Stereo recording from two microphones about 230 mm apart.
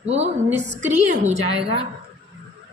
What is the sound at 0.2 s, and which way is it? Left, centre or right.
A woman's voice, right.